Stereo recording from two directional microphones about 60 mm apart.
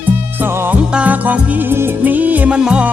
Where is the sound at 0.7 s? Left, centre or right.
Right.